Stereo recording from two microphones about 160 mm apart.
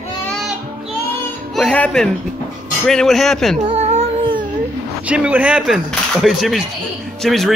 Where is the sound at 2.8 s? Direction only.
5° left (ahead or behind).